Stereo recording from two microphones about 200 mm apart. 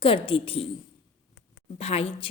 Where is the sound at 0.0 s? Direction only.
25° left (ahead or behind).